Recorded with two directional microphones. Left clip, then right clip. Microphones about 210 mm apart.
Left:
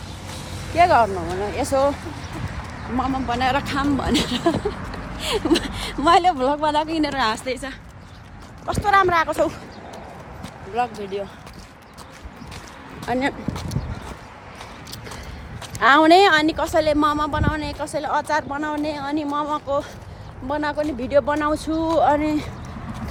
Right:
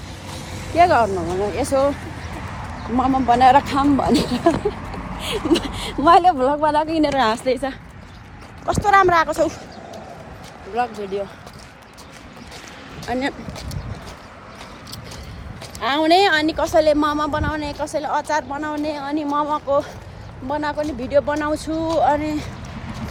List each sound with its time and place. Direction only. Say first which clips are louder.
0.3 s vehicle: right 3 dB; 35° right (ahead or behind)
0.7 s a woman's voice: right 1 dB; centre (ahead or behind)
3.2 s speech: right 12 dB; 20° right (ahead or behind)
3.9 s a woman's voice: right 3 dB; 10° right (ahead or behind)
5.2 s speech: even; 5° left (ahead or behind)
13.1 s speech: left 1 dB; 15° left (ahead or behind)
15.8 s speech: left 3 dB; 25° left (ahead or behind)
16.6 s speech: right 3 dB; 10° left (ahead or behind)